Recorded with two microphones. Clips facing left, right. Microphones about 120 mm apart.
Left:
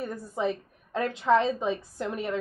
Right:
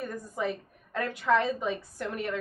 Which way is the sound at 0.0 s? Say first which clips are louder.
Left 3 dB; 25° left (ahead or behind).